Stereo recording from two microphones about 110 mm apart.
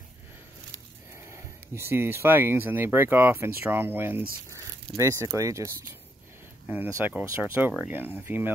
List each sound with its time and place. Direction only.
1.1 s speech: 25° right (ahead or behind)
6.9 s speech: 25° right (ahead or behind)